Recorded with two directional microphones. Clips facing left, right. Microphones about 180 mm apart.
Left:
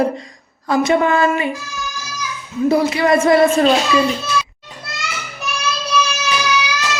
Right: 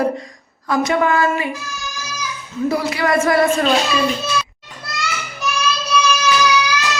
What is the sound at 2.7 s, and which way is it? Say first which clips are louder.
Speech: left 4 dB; 25° left (ahead or behind).